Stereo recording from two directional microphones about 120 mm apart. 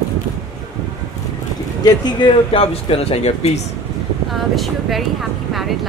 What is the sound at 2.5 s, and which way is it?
Speech, 50° left (ahead or behind).